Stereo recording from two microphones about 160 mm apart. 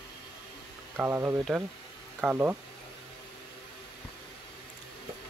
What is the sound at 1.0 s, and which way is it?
Speech, 15° right (ahead or behind).